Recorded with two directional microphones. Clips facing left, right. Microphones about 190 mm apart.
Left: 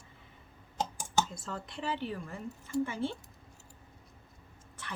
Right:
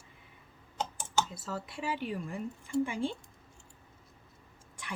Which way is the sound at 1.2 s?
5° right (ahead or behind).